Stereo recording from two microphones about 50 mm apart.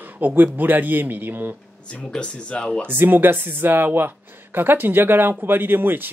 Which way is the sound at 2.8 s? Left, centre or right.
Right.